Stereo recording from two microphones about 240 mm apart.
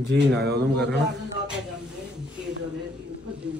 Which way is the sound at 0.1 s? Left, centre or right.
Right.